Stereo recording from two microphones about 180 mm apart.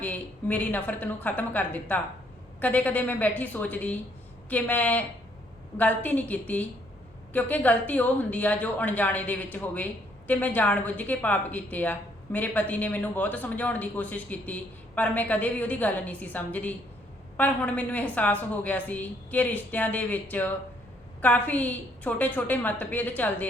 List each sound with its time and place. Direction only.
0.0 s speech: 10° left (ahead or behind)